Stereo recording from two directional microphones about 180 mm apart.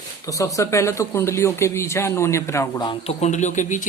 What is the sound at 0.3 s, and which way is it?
Speech, 20° left (ahead or behind).